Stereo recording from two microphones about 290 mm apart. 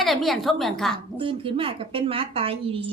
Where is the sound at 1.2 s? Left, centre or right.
Centre.